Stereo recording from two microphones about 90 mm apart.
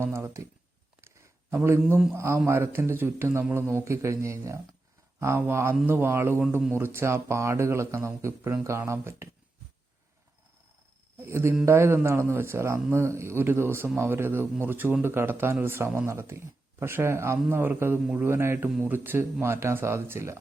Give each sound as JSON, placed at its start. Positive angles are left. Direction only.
{"t": 0.0, "sound": "a man's voice", "side_deg": -25}
{"t": 1.0, "sound": "a sound", "side_deg": -30}
{"t": 2.1, "sound": "a man's voice", "side_deg": -30}
{"t": 11.3, "sound": "a man's voice", "side_deg": -30}